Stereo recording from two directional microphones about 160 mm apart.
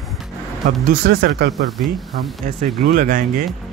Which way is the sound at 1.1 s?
85° right.